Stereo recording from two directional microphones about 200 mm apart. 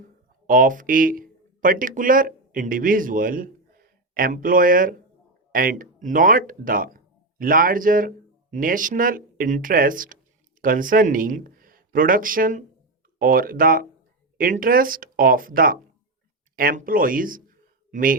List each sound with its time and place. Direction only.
0.4 s speech: 45° right (ahead or behind)